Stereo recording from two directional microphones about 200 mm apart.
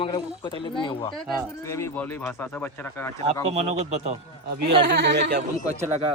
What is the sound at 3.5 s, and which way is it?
Speech, 30° right (ahead or behind).